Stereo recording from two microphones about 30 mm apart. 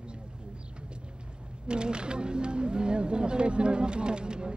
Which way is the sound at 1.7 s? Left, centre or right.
Right.